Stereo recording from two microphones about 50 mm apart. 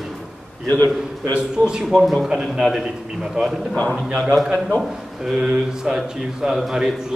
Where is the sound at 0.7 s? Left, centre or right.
Left.